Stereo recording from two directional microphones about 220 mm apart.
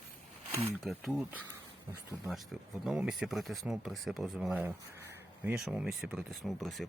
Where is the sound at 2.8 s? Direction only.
5° right (ahead or behind).